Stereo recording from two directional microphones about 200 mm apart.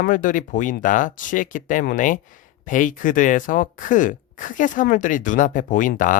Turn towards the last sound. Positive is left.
turn(degrees=40)  # may be behind; listen again after turning